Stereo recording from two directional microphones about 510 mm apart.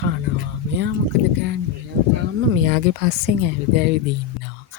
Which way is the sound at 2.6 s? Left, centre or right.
Centre.